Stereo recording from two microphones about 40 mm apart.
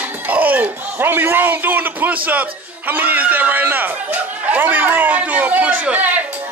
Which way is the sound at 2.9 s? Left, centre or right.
Right.